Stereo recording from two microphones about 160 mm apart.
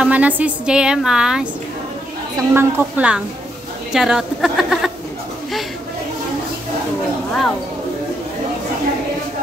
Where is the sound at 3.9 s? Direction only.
5° right (ahead or behind).